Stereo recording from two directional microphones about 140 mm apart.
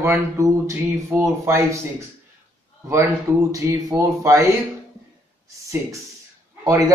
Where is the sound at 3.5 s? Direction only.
20° right (ahead or behind).